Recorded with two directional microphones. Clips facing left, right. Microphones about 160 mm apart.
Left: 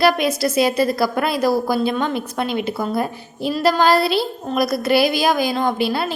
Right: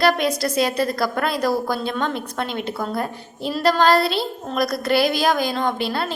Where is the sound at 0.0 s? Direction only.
5° left (ahead or behind).